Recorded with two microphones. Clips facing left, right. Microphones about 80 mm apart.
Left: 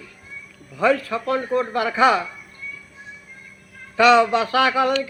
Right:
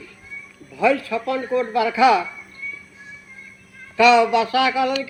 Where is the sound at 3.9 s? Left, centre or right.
Left.